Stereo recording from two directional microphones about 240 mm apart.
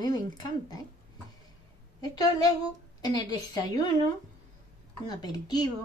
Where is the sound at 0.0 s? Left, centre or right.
Centre.